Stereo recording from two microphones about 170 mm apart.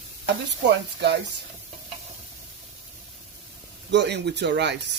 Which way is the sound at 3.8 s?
90° right.